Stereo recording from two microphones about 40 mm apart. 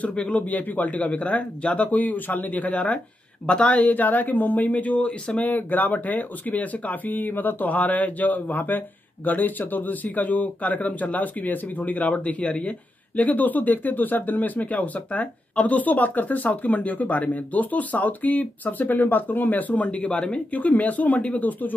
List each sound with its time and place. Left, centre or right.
0.0 s speech: left
3.4 s speech: left
3.8 s speech: left
5.5 s speech: left
20.5 s speech: left